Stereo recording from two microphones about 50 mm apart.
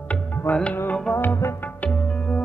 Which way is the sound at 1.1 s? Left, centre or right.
Left.